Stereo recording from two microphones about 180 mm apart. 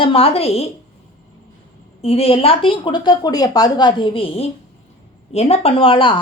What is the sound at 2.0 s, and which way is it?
A woman's voice, 35° left (ahead or behind).